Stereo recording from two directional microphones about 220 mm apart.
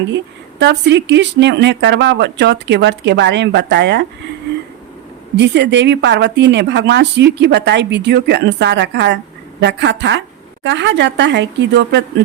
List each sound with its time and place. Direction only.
0.6 s speech: 50° right (ahead or behind)
5.4 s a woman's voice: 50° right (ahead or behind)